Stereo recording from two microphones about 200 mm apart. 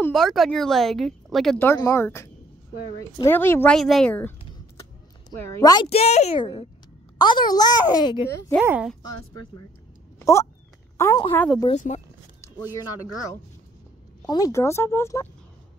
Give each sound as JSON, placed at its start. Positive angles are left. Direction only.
{"t": 0.0, "sound": "speech", "side_deg": 0}
{"t": 5.6, "sound": "a woman's voice", "side_deg": 20}
{"t": 5.9, "sound": "a child's voice", "side_deg": 30}
{"t": 8.6, "sound": "speech", "side_deg": -5}
{"t": 11.0, "sound": "a woman's voice", "side_deg": 15}
{"t": 11.7, "sound": "a child's voice", "side_deg": 35}
{"t": 14.2, "sound": "speech", "side_deg": 20}